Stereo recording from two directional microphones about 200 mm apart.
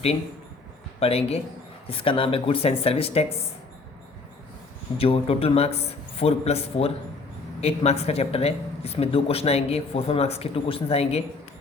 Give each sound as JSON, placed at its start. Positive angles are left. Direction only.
{"t": 0.9, "sound": "speech", "side_deg": 30}
{"t": 4.9, "sound": "speech", "side_deg": 30}